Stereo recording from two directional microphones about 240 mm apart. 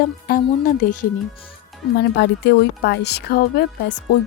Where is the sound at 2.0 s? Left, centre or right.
Left.